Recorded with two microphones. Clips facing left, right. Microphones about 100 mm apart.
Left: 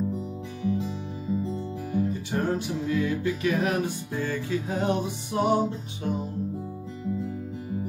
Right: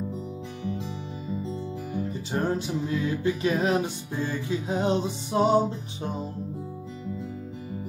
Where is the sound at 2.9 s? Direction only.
25° right (ahead or behind).